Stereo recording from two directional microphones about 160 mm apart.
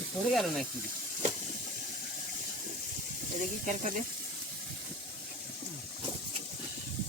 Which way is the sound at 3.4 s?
50° right (ahead or behind).